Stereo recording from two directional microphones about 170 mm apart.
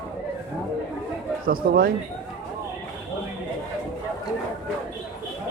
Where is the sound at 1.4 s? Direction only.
60° right (ahead or behind).